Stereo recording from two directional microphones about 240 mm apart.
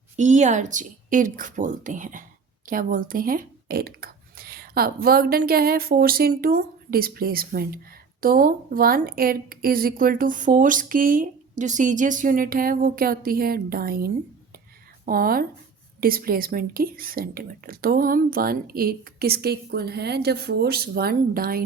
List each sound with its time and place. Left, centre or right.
0.2 s speech: right